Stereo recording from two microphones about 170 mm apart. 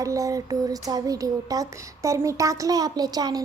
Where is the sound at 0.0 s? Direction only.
20° right (ahead or behind).